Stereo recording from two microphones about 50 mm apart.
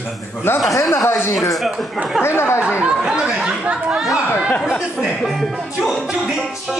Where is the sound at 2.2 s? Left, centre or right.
Left.